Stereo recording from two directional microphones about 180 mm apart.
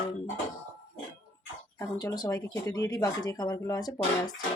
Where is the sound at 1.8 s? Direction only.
20° left (ahead or behind).